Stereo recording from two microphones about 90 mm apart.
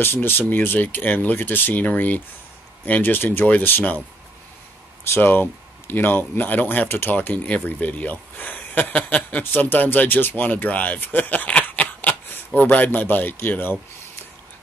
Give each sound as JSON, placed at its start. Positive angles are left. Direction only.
{"t": 0.0, "sound": "speech", "side_deg": 25}
{"t": 5.1, "sound": "speech", "side_deg": 20}